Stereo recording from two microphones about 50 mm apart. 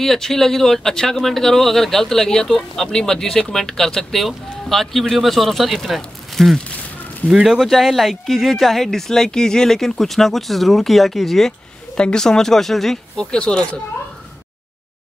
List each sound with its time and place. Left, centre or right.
0.0 s speech: centre
7.2 s speech: centre
7.6 s speech: centre
12.0 s speech: centre
13.2 s speech: centre